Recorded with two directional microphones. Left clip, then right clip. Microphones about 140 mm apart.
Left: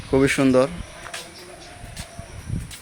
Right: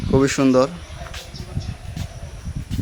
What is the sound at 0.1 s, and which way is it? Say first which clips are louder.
Speech: right 1 dB; 15° right (ahead or behind).